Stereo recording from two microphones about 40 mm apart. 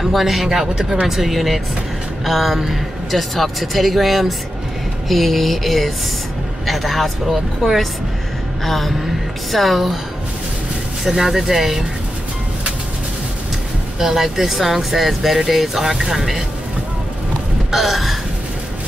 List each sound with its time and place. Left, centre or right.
0.0 s a man's voice: centre
11.1 s speech: centre
13.9 s speech: centre
17.6 s gasp: centre